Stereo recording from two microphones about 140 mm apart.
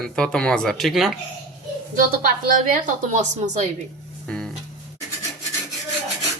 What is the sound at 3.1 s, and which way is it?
Speech, 60° right (ahead or behind).